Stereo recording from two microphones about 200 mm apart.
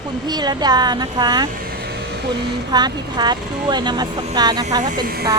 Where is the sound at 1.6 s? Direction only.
50° right (ahead or behind).